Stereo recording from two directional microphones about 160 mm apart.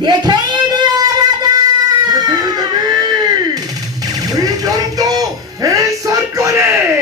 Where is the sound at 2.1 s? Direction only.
25° right (ahead or behind).